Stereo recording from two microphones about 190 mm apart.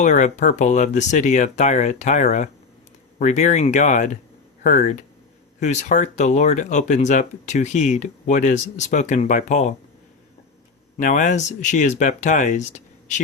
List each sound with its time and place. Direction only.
0.0 s speech: 40° left (ahead or behind)
10.9 s speech: 40° left (ahead or behind)